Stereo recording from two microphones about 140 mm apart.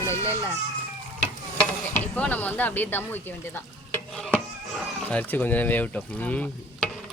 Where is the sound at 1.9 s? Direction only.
10° left (ahead or behind).